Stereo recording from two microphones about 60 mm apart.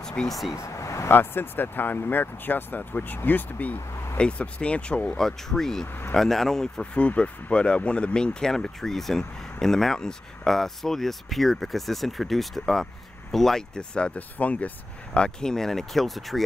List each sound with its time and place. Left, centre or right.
0.0 s vehicle: centre
0.3 s speech: centre
0.6 s vehicle: left
1.1 s speech: left
15.1 s speech: centre